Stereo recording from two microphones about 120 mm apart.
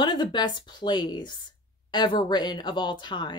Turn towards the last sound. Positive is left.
turn(degrees=40)  # may be behind; listen again after turning